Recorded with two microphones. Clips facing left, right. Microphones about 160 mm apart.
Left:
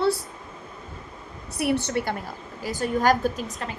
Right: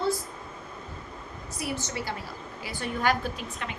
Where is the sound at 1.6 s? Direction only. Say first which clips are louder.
Left 9 dB; 65° left (ahead or behind).